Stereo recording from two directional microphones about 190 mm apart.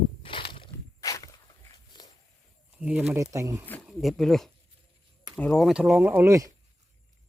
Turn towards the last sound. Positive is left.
turn(degrees=-15)  # may be behind; listen again after turning